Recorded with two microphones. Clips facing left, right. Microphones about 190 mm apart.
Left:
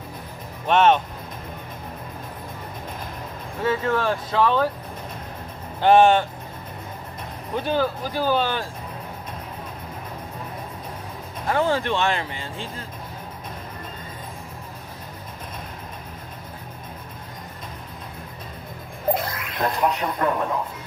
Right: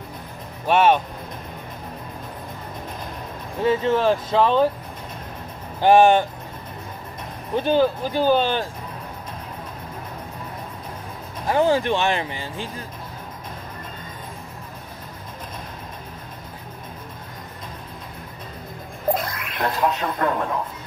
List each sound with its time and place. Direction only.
0.7 s speech: 10° right (ahead or behind)
3.6 s speech: 25° right (ahead or behind)
5.8 s speech: 15° right (ahead or behind)
7.5 s speech: 25° right (ahead or behind)
11.4 s speech: 15° right (ahead or behind)
19.1 s a sound: 25° left (ahead or behind)
20.0 s a man's voice: 20° left (ahead or behind)